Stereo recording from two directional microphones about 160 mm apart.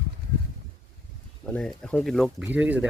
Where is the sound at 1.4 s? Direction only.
5° left (ahead or behind).